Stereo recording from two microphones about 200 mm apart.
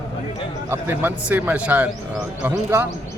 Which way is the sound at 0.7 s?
10° right (ahead or behind).